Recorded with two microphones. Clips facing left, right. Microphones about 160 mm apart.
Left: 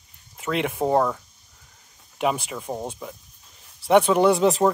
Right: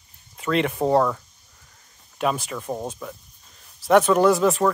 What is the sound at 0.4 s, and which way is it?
Speech, 10° left (ahead or behind).